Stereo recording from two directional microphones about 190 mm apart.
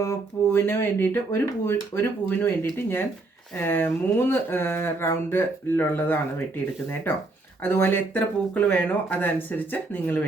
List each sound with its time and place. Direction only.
0.0 s speech: 15° left (ahead or behind)
7.6 s speech: 10° left (ahead or behind)